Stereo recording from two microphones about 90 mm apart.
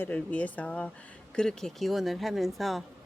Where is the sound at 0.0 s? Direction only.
15° left (ahead or behind).